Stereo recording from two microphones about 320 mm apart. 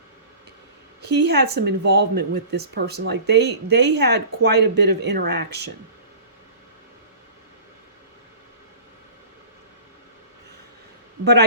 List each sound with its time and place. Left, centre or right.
1.0 s speech: right